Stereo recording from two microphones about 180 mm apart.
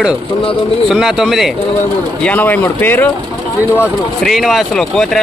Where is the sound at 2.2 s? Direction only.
10° left (ahead or behind).